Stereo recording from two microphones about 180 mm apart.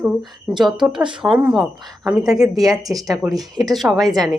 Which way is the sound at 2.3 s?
20° right (ahead or behind).